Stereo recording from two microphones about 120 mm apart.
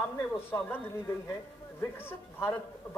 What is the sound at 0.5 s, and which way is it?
Speech, 20° left (ahead or behind).